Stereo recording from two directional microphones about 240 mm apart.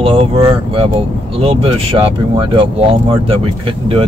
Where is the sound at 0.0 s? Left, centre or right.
Right.